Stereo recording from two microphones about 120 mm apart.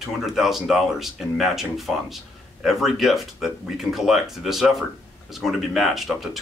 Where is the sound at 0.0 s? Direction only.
5° right (ahead or behind).